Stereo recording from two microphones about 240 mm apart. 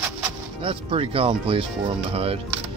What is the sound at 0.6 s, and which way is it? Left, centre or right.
Speech, right.